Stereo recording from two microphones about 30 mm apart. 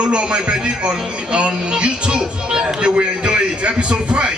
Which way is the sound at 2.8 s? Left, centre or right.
Right.